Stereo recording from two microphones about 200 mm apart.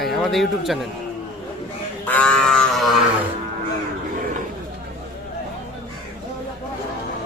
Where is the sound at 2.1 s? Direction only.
5° left (ahead or behind).